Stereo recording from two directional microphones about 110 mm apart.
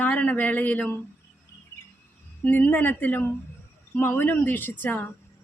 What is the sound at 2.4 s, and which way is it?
A woman's voice, 15° left (ahead or behind).